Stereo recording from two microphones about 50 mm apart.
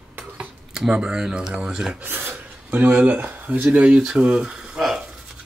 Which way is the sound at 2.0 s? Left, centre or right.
Right.